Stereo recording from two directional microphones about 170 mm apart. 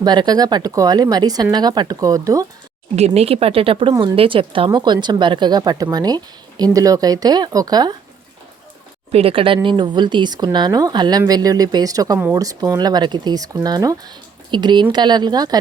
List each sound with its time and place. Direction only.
0.0 s speech: 25° right (ahead or behind)
3.2 s speech: 35° right (ahead or behind)
9.1 s speech: 35° right (ahead or behind)